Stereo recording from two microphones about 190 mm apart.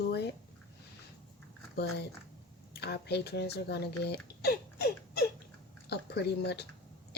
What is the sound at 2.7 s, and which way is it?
Speech, 60° left (ahead or behind).